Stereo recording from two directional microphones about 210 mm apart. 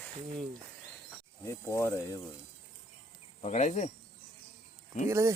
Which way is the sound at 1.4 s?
15° left (ahead or behind).